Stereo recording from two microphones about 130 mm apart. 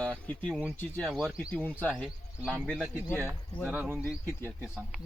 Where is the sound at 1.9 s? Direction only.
5° right (ahead or behind).